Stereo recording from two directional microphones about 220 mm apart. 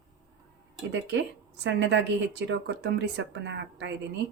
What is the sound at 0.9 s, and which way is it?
Speech, 55° right (ahead or behind).